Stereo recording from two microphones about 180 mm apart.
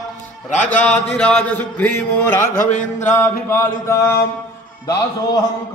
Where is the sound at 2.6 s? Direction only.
40° left (ahead or behind).